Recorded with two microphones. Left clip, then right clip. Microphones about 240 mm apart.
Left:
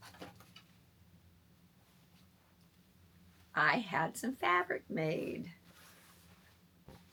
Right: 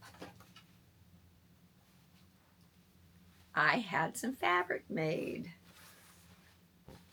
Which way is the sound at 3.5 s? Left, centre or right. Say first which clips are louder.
Even; centre.